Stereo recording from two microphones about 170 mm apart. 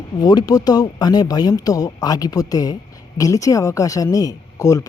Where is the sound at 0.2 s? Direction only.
25° left (ahead or behind).